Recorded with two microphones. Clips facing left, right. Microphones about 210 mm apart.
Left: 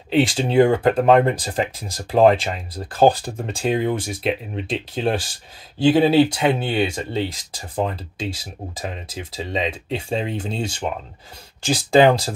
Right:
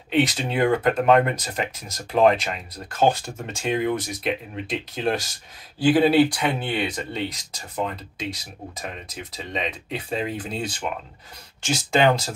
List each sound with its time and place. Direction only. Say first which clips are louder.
0.1 s speech: left 4 dB; 30° left (ahead or behind)